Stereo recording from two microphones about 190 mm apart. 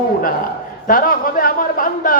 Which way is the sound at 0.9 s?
50° left (ahead or behind).